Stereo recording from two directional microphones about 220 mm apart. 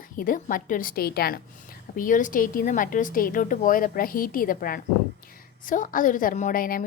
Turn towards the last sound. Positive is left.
turn(degrees=40)  # may be behind; listen again after turning